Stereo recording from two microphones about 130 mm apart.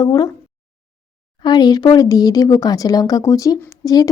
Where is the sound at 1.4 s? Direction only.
30° left (ahead or behind).